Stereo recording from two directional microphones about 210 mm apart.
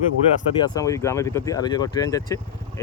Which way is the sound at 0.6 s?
15° left (ahead or behind).